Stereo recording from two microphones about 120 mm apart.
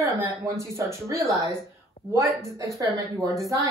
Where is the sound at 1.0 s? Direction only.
25° right (ahead or behind).